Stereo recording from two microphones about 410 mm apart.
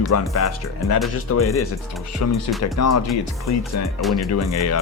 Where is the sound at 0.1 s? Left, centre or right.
Left.